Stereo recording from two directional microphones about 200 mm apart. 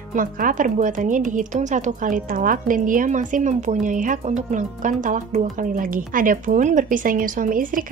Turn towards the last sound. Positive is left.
turn(degrees=-45)  # may be behind; listen again after turning